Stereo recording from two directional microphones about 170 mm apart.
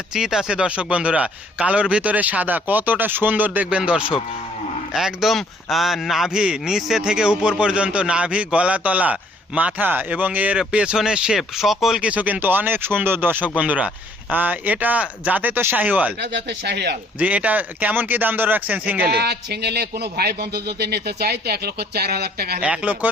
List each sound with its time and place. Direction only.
0.1 s a man's voice: 5° right (ahead or behind)
16.3 s speech: 80° right
17.2 s speech: 10° right (ahead or behind)
19.1 s speech: 75° right (ahead or behind)
22.6 s speech: 5° right (ahead or behind)